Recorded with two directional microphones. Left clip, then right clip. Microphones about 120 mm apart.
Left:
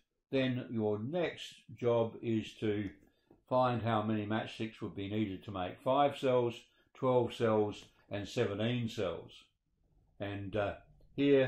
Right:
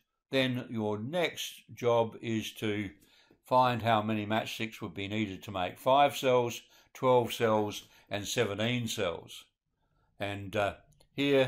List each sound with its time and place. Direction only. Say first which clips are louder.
0.3 s speech: right 4 dB; 20° right (ahead or behind)
10.1 s speech: right 4 dB; 15° right (ahead or behind)